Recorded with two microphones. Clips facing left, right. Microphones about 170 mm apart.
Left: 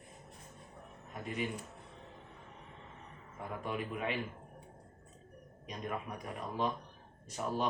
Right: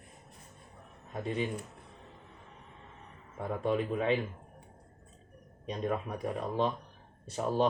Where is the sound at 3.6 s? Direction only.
30° right (ahead or behind).